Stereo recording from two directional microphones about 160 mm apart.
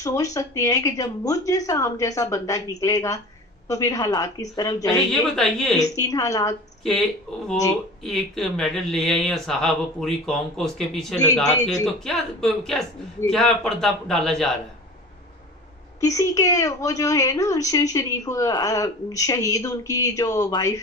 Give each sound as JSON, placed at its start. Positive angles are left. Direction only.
{"t": 0.0, "sound": "a woman's voice", "side_deg": 20}
{"t": 5.3, "sound": "speech", "side_deg": 0}
{"t": 5.9, "sound": "a woman's voice", "side_deg": 20}
{"t": 6.8, "sound": "speech", "side_deg": 0}
{"t": 16.0, "sound": "a woman's voice", "side_deg": 20}